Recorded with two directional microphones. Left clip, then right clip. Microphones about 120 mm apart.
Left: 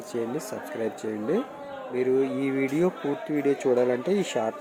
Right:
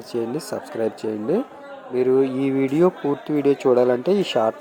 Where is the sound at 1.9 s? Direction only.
30° right (ahead or behind).